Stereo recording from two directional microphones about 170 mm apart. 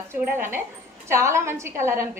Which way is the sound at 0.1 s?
15° right (ahead or behind).